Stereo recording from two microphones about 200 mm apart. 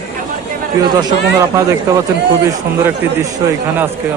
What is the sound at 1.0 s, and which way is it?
Speech, 20° right (ahead or behind).